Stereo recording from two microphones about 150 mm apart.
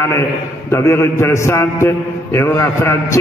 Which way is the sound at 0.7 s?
15° left (ahead or behind).